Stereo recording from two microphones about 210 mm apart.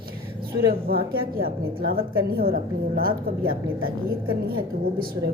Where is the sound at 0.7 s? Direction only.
45° right (ahead or behind).